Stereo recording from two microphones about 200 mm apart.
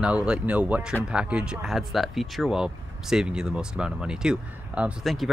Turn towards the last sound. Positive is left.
turn(degrees=0)  # may be behind; listen again after turning